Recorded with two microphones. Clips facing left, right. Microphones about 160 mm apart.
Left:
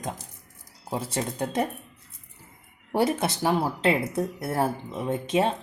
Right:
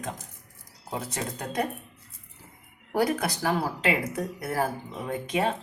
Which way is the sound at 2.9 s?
25° left (ahead or behind).